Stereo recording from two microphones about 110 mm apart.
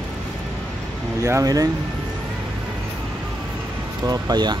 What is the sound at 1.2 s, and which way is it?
Speech, 30° right (ahead or behind).